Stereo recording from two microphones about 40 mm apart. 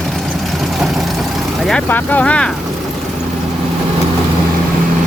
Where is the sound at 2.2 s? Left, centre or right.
Left.